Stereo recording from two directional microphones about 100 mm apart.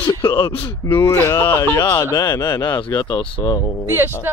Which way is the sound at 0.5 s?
55° left (ahead or behind).